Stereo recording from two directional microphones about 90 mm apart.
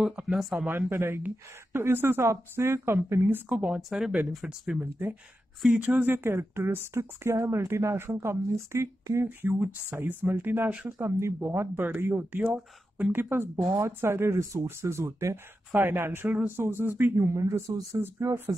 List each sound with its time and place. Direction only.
0.0 s speech: 10° right (ahead or behind)
0.7 s speech: 25° right (ahead or behind)
11.0 s speech: 30° right (ahead or behind)